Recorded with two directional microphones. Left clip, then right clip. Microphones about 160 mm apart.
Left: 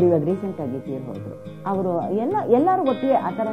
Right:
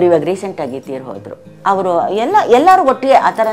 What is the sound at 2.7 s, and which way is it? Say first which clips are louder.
Speech: right 11 dB; 25° right (ahead or behind).